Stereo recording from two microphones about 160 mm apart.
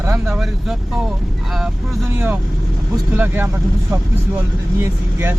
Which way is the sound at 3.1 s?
10° right (ahead or behind).